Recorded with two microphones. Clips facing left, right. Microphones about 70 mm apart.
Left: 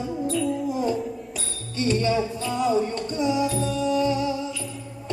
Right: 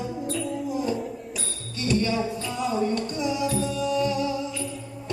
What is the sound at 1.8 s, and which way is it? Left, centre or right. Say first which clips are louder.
Music: left 2 dB; left.